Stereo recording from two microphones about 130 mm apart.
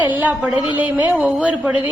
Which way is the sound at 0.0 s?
15° right (ahead or behind).